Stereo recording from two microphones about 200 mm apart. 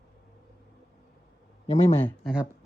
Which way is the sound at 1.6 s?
30° left (ahead or behind).